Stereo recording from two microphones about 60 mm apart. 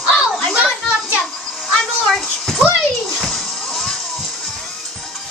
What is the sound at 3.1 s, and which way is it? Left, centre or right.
Music, centre.